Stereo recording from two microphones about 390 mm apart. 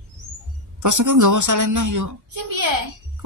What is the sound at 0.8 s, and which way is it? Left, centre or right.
A woman's voice, right.